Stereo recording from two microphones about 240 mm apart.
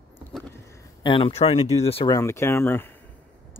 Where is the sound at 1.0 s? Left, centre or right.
Left.